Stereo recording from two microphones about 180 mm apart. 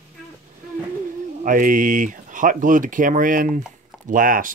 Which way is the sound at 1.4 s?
50° right (ahead or behind).